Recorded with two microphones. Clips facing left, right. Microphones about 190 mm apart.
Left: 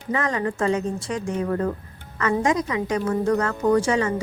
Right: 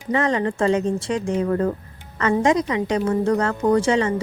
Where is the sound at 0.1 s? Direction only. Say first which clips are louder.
Right 4 dB; 30° right (ahead or behind).